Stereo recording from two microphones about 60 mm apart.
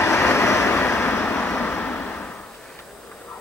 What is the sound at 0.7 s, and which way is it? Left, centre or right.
Vehicle, left.